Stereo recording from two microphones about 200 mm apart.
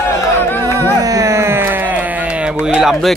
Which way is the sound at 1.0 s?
15° right (ahead or behind).